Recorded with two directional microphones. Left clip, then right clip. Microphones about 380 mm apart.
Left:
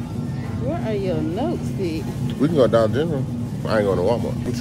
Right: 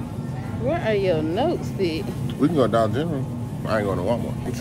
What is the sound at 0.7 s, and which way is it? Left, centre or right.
Speech, right.